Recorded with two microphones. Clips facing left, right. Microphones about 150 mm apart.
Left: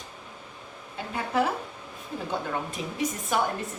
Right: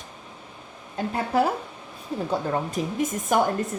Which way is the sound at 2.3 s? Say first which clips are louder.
Right 5 dB; 45° right (ahead or behind).